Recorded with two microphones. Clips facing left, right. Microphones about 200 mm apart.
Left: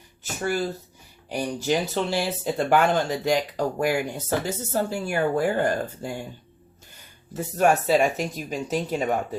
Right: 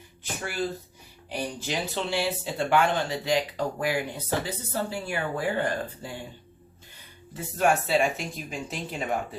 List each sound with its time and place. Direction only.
0.2 s a sound: 40° left (ahead or behind)
1.6 s speech: 45° left (ahead or behind)
7.3 s speech: 40° left (ahead or behind)